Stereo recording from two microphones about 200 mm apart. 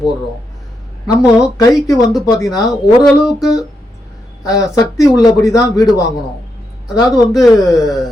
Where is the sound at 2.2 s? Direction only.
20° left (ahead or behind).